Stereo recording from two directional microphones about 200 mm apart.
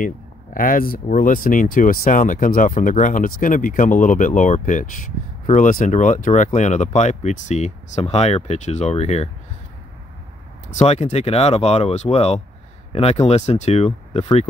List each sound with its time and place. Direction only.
0.6 s speech: 45° left (ahead or behind)
10.8 s speech: 30° left (ahead or behind)